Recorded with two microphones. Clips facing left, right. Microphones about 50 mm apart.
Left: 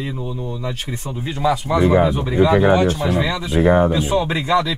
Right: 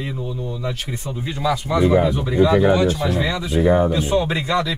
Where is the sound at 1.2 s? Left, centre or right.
Left.